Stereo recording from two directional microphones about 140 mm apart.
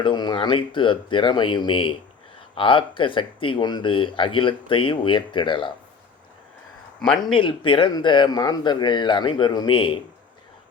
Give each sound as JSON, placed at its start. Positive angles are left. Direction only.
{"t": 0.0, "sound": "speech", "side_deg": 30}
{"t": 7.0, "sound": "a man's voice", "side_deg": 5}
{"t": 7.3, "sound": "speech", "side_deg": 35}